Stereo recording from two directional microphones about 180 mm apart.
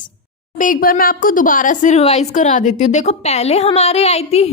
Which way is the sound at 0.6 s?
50° left (ahead or behind).